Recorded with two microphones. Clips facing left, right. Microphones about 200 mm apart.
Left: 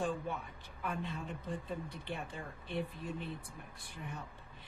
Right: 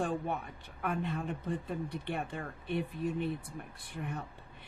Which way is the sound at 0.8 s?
60° right (ahead or behind).